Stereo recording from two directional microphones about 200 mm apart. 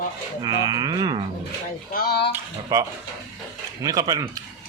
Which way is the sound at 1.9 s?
50° left (ahead or behind).